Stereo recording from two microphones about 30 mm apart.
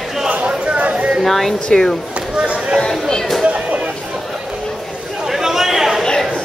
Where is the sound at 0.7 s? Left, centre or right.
Right.